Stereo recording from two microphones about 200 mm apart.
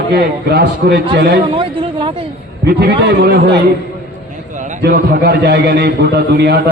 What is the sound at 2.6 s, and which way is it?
A man's voice, 50° right (ahead or behind).